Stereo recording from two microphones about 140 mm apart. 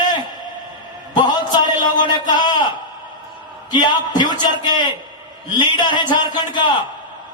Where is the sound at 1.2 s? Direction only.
30° left (ahead or behind).